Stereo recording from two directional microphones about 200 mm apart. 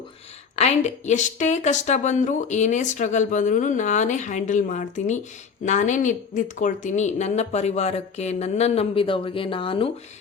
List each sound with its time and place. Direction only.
0.5 s a woman's voice: 35° left (ahead or behind)